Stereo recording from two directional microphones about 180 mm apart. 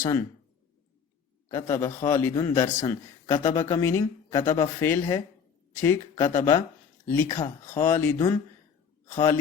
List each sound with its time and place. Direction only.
0.0 s a man's voice: 15° left (ahead or behind)
1.5 s a man's voice: 15° left (ahead or behind)